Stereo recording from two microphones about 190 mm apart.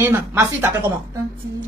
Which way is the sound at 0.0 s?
10° right (ahead or behind).